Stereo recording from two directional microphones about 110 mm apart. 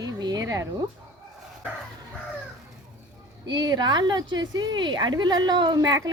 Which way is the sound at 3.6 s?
40° right (ahead or behind).